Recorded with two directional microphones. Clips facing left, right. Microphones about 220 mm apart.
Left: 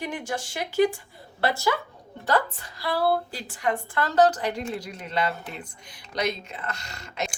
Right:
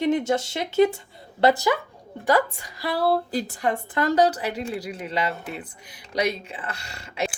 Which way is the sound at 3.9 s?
15° right (ahead or behind).